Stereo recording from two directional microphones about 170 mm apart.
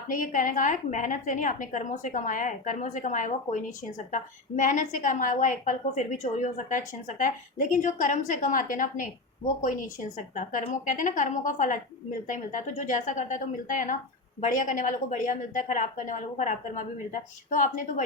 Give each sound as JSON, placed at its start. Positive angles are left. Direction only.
{"t": 0.1, "sound": "a woman's voice", "side_deg": 50}